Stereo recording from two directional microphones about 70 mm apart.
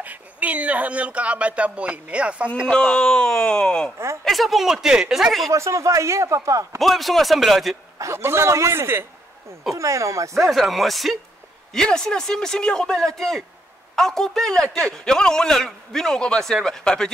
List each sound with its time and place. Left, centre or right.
0.0 s speech: right
2.7 s a man's voice: centre
4.2 s speech: centre
5.5 s a man's voice: right
6.8 s speech: centre
8.0 s a man's voice: right
9.8 s a man's voice: right
10.3 s a man's voice: centre